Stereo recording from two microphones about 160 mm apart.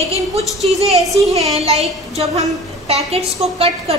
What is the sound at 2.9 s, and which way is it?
A woman's voice, 40° right (ahead or behind).